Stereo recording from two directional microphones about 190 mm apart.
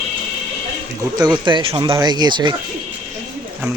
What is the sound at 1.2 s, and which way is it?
Speech, 20° right (ahead or behind).